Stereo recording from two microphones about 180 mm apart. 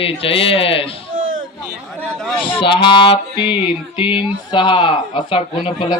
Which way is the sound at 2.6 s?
25° left (ahead or behind).